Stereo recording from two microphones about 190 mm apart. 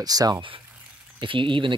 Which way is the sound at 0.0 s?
20° right (ahead or behind).